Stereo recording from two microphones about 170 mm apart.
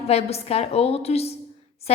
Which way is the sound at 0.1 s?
35° left (ahead or behind).